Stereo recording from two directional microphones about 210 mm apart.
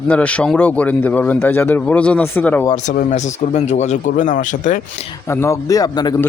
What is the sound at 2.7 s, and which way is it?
Speech, 35° left (ahead or behind).